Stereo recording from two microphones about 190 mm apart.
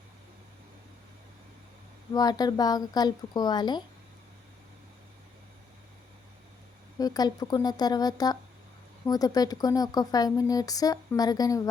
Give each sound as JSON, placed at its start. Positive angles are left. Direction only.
{"t": 2.1, "sound": "speech", "side_deg": 20}
{"t": 7.0, "sound": "speech", "side_deg": 20}